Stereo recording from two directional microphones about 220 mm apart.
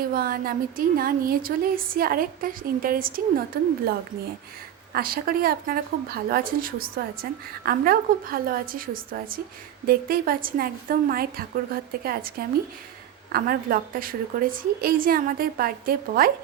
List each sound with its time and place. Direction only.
0.1 s a woman's voice: 40° right (ahead or behind)
4.9 s a woman's voice: 40° right (ahead or behind)